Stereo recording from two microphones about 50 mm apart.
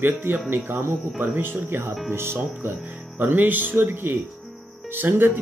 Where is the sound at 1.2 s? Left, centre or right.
Right.